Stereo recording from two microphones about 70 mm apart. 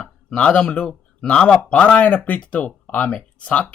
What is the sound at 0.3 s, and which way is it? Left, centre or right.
A man's voice, centre.